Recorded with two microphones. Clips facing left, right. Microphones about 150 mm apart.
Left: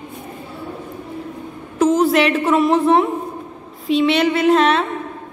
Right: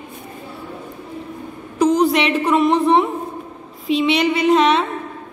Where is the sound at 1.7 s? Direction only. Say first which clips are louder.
Left 1 dB; centre (ahead or behind).